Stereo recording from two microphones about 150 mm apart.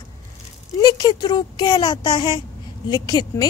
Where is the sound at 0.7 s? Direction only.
30° left (ahead or behind).